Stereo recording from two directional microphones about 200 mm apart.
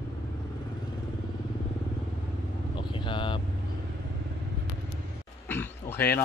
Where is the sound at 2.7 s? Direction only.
25° left (ahead or behind).